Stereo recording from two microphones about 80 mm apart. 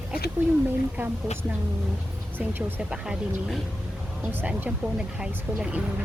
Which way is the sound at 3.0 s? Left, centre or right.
Centre.